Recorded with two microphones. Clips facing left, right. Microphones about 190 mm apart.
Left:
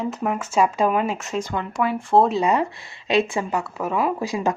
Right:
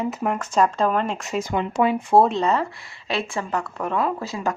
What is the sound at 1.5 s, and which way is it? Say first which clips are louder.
Speech: right 5 dB; 20° right (ahead or behind).